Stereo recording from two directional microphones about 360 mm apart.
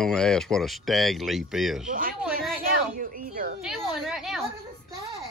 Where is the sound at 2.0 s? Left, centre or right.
Right.